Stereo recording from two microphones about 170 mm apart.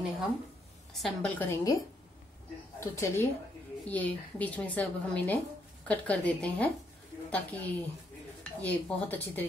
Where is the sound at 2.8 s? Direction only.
15° left (ahead or behind).